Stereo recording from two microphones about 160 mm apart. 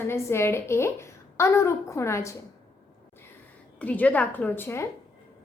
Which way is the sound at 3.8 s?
10° left (ahead or behind).